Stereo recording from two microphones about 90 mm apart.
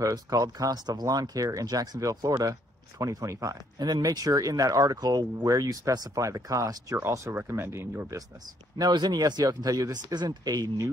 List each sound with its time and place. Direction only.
0.0 s speech: 40° right (ahead or behind)
7.0 s speech: 25° right (ahead or behind)
8.7 s speech: 50° right (ahead or behind)
10.0 s speech: 50° right (ahead or behind)